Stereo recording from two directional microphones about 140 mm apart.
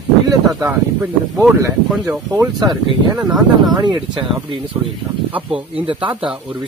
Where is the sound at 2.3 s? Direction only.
25° right (ahead or behind).